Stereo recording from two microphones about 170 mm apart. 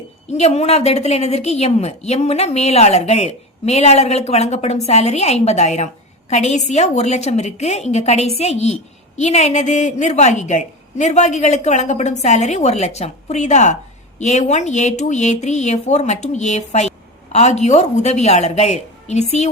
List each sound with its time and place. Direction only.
0.3 s a woman's voice: 40° left (ahead or behind)